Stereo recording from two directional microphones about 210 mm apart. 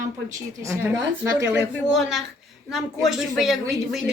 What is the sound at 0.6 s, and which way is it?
Speech, 15° right (ahead or behind).